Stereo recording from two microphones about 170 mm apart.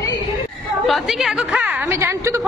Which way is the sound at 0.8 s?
Centre (ahead or behind).